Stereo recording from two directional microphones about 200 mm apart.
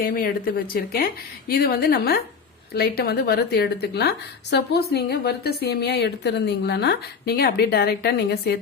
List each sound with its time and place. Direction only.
0.0 s a woman's voice: 45° left (ahead or behind)